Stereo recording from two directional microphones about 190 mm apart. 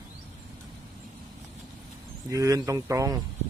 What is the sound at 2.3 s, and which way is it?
Speech, 15° right (ahead or behind).